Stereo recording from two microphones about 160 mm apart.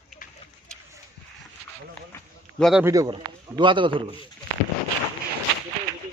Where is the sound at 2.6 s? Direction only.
Centre (ahead or behind).